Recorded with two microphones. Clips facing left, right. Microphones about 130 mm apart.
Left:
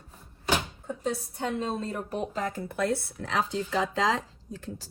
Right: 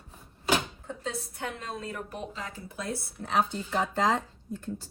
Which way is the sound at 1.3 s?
25° left (ahead or behind).